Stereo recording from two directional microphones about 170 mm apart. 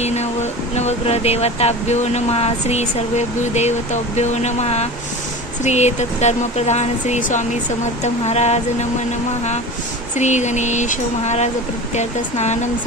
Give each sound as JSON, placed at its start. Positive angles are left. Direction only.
{"t": 0.0, "sound": "a sound", "side_deg": 40}
{"t": 0.7, "sound": "speech", "side_deg": 40}
{"t": 10.1, "sound": "speech", "side_deg": 45}